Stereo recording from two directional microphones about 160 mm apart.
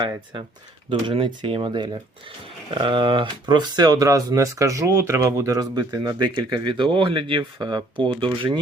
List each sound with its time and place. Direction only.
0.9 s speech: 30° right (ahead or behind)